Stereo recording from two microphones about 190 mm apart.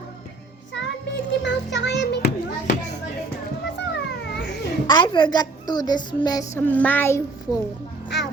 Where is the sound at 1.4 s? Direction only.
65° left (ahead or behind).